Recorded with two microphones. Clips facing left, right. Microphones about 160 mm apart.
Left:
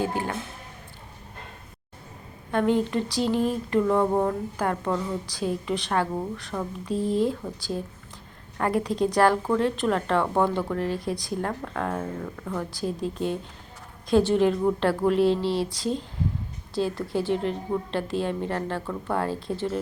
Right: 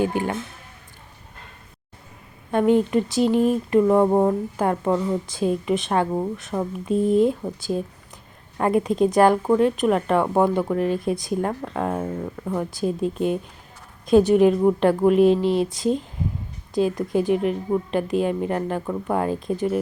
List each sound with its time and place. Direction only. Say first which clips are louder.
0.0 s a woman's voice: right 5 dB; 15° right (ahead or behind)
2.5 s a woman's voice: right 5 dB; 15° right (ahead or behind)